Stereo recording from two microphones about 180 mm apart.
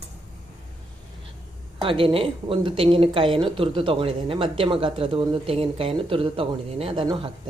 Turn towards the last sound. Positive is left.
turn(degrees=-30)  # may be behind; listen again after turning